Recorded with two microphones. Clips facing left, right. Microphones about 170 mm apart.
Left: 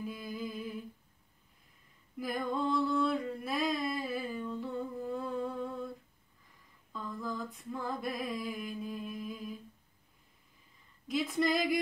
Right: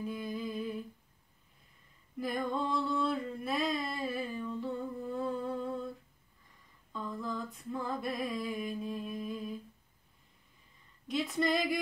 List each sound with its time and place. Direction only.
0.0 s humming: centre (ahead or behind)
2.1 s a sound: centre (ahead or behind)
6.9 s female singing: centre (ahead or behind)
11.1 s female singing: centre (ahead or behind)